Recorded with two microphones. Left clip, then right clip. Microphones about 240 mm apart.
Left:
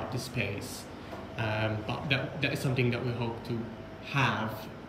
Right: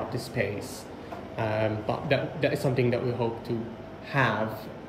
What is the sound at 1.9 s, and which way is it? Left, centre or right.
Speech, right.